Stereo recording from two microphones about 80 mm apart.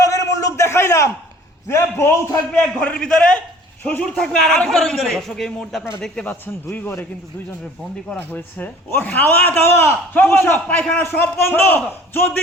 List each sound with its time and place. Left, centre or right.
0.0 s a sound: left
1.6 s a man's voice: left
2.5 s a man's voice: centre
6.7 s a man's voice: left
8.1 s a man's voice: left
9.6 s a man's voice: left
10.8 s a man's voice: centre
11.0 s a man's voice: left